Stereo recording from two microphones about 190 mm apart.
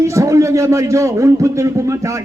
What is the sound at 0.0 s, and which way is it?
A man's voice, 15° right (ahead or behind).